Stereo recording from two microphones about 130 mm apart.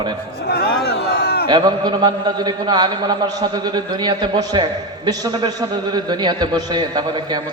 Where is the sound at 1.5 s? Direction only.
35° right (ahead or behind).